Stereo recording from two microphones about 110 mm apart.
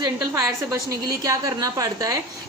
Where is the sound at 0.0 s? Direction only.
35° right (ahead or behind).